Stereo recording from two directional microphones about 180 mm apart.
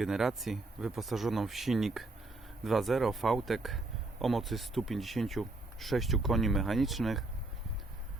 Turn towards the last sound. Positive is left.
turn(degrees=0)  # may be behind; listen again after turning